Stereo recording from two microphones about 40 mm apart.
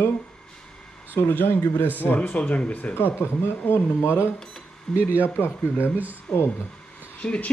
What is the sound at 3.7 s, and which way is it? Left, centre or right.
Speech, left.